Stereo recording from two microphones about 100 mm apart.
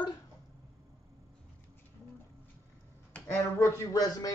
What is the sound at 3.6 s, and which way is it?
Speech, 35° left (ahead or behind).